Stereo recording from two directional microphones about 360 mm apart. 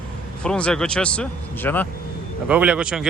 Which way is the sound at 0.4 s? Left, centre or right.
Centre.